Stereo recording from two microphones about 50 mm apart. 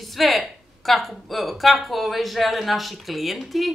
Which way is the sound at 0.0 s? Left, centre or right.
Centre.